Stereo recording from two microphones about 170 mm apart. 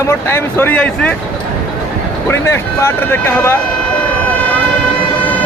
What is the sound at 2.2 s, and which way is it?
Speech, 15° left (ahead or behind).